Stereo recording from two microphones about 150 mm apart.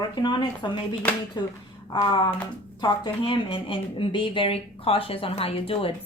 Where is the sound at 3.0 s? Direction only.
35° left (ahead or behind).